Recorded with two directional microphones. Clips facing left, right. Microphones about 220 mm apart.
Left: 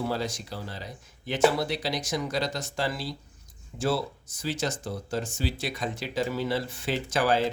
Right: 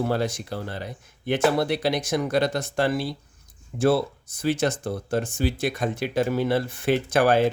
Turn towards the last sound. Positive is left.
turn(degrees=-55)  # may be behind; listen again after turning